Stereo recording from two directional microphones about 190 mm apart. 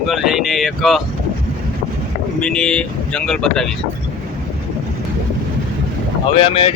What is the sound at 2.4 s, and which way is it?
Speech, 5° left (ahead or behind).